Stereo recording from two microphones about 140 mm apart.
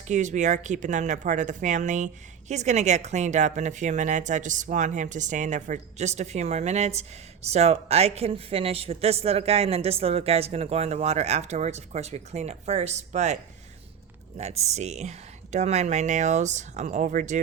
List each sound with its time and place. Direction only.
0.1 s speech: 60° right (ahead or behind)